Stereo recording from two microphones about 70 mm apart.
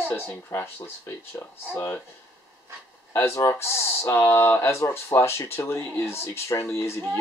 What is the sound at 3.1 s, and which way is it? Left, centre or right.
Speech, left.